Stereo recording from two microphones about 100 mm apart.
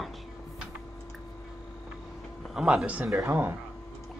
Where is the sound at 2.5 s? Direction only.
5° right (ahead or behind).